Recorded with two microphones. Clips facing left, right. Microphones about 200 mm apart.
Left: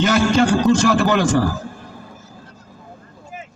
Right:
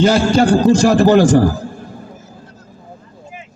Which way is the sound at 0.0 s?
30° right (ahead or behind).